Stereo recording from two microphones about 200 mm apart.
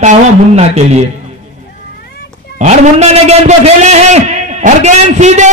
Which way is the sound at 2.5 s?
35° right (ahead or behind).